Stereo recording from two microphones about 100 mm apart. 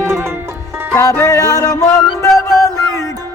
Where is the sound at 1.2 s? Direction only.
35° left (ahead or behind).